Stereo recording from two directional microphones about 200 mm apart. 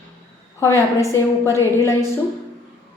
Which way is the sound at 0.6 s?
15° left (ahead or behind).